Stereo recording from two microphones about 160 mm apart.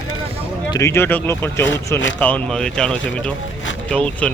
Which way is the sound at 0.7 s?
15° left (ahead or behind).